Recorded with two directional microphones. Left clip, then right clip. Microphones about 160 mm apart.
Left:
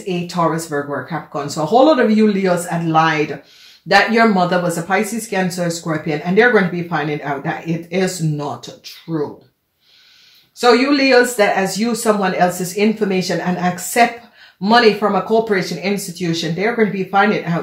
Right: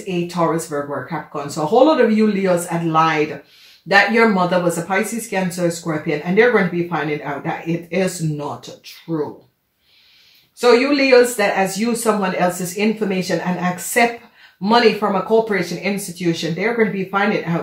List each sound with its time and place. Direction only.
0.0 s speech: 40° left (ahead or behind)
10.6 s speech: 40° left (ahead or behind)